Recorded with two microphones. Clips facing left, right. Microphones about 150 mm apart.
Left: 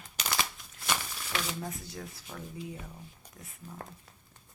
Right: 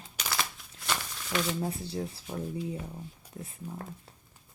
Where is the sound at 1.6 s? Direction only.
30° right (ahead or behind).